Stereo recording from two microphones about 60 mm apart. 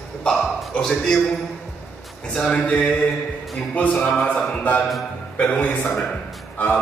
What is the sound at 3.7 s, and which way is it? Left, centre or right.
Mantra, left.